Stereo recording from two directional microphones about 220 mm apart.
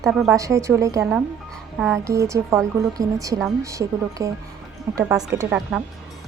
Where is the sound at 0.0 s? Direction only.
Centre (ahead or behind).